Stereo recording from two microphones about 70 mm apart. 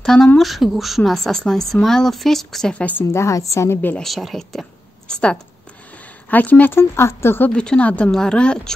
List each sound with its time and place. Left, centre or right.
0.0 s a woman's voice: centre
2.7 s speech: left
3.1 s a woman's voice: left
4.0 s speech: centre
6.3 s speech: left
6.8 s speech: left
7.4 s speech: centre